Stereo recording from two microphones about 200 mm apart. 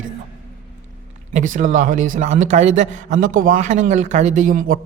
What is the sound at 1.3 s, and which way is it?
A man's voice, 40° right (ahead or behind).